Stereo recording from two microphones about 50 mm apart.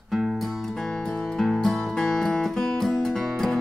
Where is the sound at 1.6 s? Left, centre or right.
Centre.